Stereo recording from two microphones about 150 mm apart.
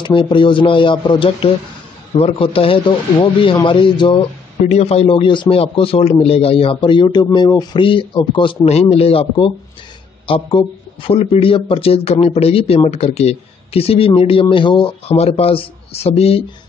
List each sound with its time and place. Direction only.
0.0 s a man's voice: 35° left (ahead or behind)
4.6 s a man's voice: 45° left (ahead or behind)
8.6 s a man's voice: 45° left (ahead or behind)